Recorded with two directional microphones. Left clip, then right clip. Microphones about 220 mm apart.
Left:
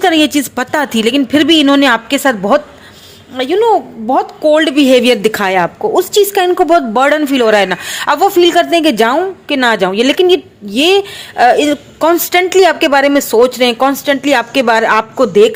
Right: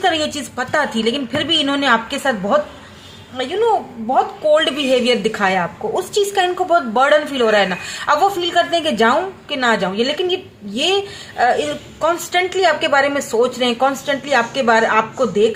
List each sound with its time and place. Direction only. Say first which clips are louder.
0.0 s a woman's voice: left 7 dB; 45° left (ahead or behind)